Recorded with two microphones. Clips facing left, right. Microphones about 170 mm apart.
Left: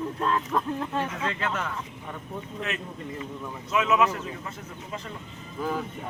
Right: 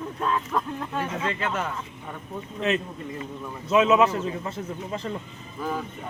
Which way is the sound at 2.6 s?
25° right (ahead or behind).